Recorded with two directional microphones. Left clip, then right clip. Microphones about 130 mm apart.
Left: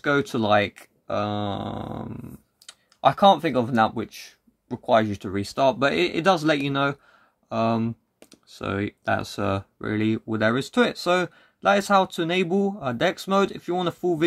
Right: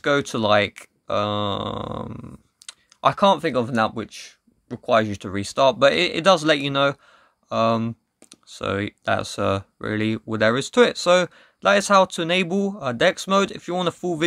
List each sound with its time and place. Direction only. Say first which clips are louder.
0.0 s speech: right 2 dB; 35° right (ahead or behind)
3.0 s speech: left 1 dB; 25° right (ahead or behind)